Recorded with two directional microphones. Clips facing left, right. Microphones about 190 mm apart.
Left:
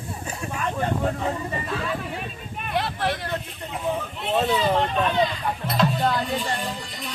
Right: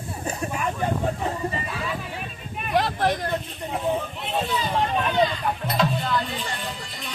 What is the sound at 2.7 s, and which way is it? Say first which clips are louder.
Vehicle: right 3 dB; 45° right (ahead or behind).